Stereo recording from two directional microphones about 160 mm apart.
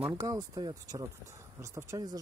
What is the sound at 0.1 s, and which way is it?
Speech, 20° right (ahead or behind).